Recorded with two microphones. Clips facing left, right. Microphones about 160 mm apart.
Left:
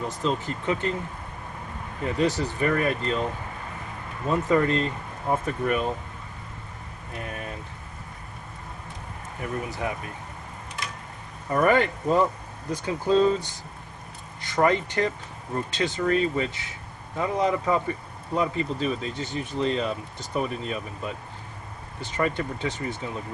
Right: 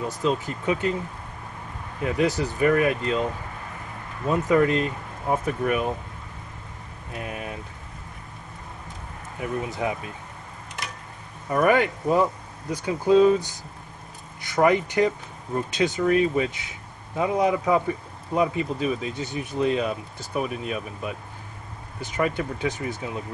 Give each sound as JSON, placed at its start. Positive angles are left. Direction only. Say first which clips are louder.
{"t": 0.2, "sound": "speech", "louder": "right 3 dB", "side_deg": -10}
{"t": 2.0, "sound": "speech", "louder": "right 1 dB", "side_deg": -10}
{"t": 4.3, "sound": "speech", "louder": "right 2 dB", "side_deg": -10}
{"t": 7.2, "sound": "speech", "louder": "right 2 dB", "side_deg": -10}
{"t": 9.4, "sound": "speech", "louder": "right 3 dB", "side_deg": -15}
{"t": 11.5, "sound": "speech", "louder": "right 1 dB", "side_deg": -10}